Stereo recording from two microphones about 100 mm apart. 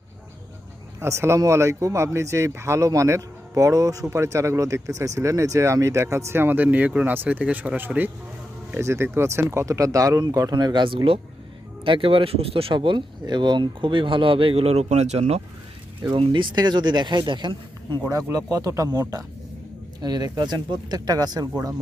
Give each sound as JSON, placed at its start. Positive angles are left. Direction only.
{"t": 0.9, "sound": "speech", "side_deg": -30}
{"t": 16.1, "sound": "speech", "side_deg": -60}
{"t": 18.1, "sound": "speech", "side_deg": -35}